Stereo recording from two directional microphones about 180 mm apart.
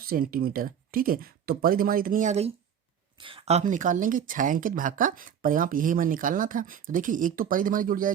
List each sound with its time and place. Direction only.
0.0 s speech: 55° right (ahead or behind)
3.2 s speech: 30° right (ahead or behind); by 8.1 s 50° right (ahead or behind)